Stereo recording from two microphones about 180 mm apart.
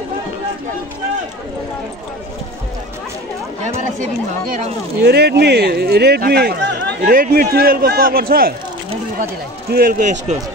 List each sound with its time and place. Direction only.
3.6 s speech: 45° right (ahead or behind)
5.0 s speech: 65° right (ahead or behind)
7.0 s speech: 50° right (ahead or behind)